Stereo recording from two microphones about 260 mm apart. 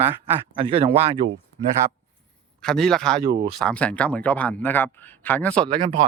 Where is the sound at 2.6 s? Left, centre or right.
Centre.